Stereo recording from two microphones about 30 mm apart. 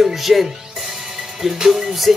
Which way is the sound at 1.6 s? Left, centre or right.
Centre.